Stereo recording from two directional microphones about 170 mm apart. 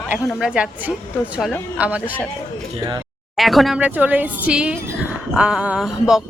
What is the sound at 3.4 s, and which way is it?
A woman's voice, centre (ahead or behind).